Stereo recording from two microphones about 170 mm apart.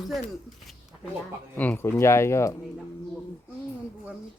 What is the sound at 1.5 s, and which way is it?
Speech, 10° left (ahead or behind).